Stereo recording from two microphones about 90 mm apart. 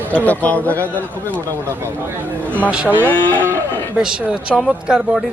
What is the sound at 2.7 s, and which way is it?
Speech, 10° right (ahead or behind).